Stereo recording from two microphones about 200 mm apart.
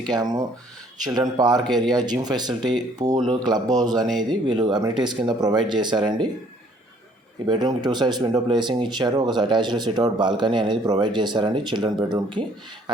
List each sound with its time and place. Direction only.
0.1 s speech: 20° right (ahead or behind)
1.6 s speech: 5° left (ahead or behind)
1.9 s speech: 20° right (ahead or behind)
7.4 s speech: 20° right (ahead or behind)